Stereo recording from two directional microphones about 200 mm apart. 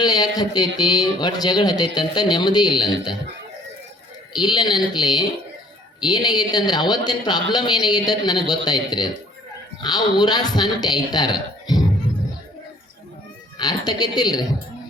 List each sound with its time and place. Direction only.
0.0 s speech: 20° left (ahead or behind)
4.4 s speech: 20° left (ahead or behind)
13.6 s speech: 20° left (ahead or behind)